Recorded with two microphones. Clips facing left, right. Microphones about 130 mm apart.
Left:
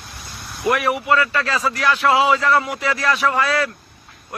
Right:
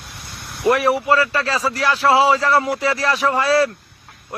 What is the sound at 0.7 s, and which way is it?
Speech, 30° right (ahead or behind).